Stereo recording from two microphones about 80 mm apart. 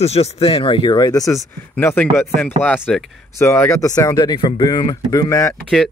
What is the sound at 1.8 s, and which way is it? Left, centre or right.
Speech, left.